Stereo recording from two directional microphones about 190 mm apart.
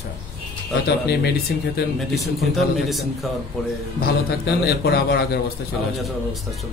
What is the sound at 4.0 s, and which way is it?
A man's voice, 55° left (ahead or behind).